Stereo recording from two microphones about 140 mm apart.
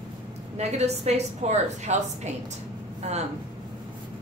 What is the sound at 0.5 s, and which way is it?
A woman's voice, 50° right (ahead or behind).